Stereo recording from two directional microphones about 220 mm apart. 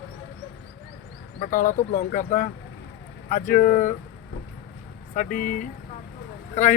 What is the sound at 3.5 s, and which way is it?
Speech, 40° left (ahead or behind).